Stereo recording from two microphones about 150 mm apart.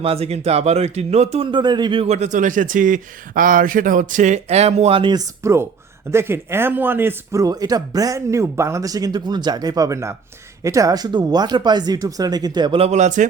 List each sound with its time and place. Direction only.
0.0 s speech: 40° right (ahead or behind)
12.8 s speech: 50° right (ahead or behind)